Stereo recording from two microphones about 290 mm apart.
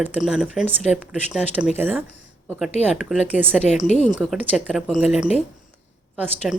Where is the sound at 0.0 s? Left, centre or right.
Centre.